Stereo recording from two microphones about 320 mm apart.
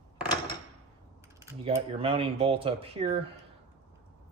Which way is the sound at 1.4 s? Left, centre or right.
Centre.